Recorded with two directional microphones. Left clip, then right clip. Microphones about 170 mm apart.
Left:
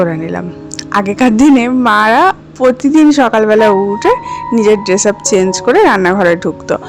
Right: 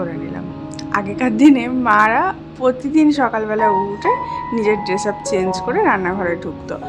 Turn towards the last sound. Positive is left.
turn(degrees=50)  # may be behind; listen again after turning